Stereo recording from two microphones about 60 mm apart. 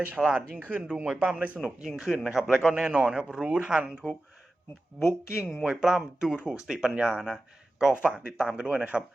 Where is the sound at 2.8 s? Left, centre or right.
Centre.